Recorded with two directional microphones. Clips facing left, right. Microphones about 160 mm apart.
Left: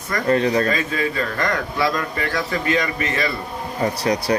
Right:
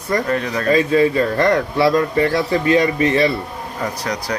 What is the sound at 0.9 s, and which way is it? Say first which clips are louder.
A man's voice: right 8 dB; 30° right (ahead or behind).